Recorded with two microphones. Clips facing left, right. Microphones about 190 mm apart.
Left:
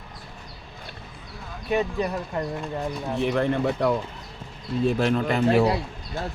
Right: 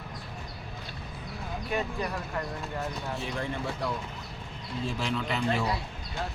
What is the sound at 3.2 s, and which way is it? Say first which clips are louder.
A man's voice: left 15 dB; 65° left (ahead or behind).